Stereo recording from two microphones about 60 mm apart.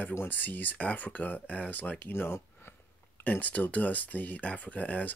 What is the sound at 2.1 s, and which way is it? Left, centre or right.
Speech, left.